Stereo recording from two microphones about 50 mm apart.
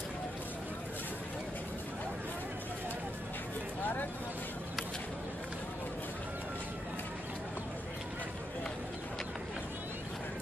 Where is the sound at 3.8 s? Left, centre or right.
Left.